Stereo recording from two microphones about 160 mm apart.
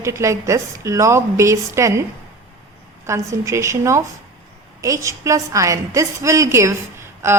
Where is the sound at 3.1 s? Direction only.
20° right (ahead or behind).